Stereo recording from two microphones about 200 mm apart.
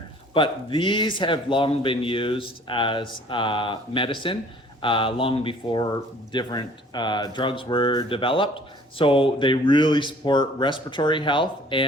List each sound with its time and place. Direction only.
0.3 s speech: 25° left (ahead or behind)